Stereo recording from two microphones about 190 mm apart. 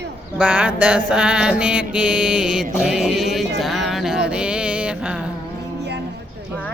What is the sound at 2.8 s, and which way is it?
Music, 5° right (ahead or behind).